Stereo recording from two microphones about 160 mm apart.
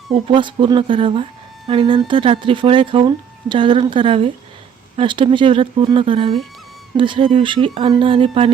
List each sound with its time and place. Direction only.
0.1 s speech: 30° right (ahead or behind)